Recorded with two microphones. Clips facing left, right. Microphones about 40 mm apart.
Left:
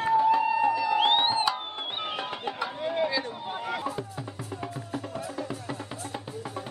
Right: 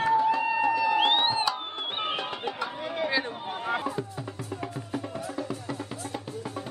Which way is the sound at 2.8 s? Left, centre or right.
Centre.